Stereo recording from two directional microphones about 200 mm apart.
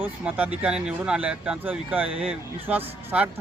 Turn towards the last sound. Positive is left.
turn(degrees=-10)  # may be behind; listen again after turning